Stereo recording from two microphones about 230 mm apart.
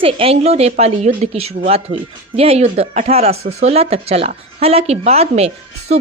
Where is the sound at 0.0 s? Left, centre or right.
Right.